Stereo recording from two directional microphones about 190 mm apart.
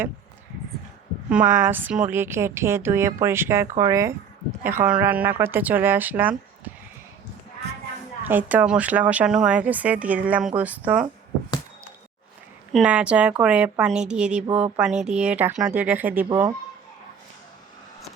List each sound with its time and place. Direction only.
1.3 s speech: 10° right (ahead or behind)
8.2 s speech: 10° right (ahead or behind)
12.7 s a woman's voice: 5° right (ahead or behind)
14.4 s speech: 30° right (ahead or behind)
14.8 s speech: 5° right (ahead or behind)